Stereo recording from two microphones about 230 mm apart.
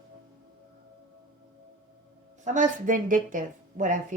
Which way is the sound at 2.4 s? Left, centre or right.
Right.